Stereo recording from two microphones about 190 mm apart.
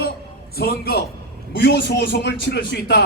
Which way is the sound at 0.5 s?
55° left (ahead or behind).